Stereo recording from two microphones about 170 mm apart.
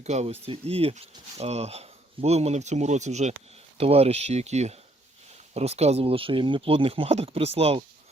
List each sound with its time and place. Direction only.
0.0 s speech: 40° right (ahead or behind)